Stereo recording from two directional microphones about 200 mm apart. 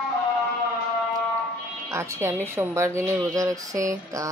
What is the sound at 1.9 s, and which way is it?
Speech, 15° right (ahead or behind).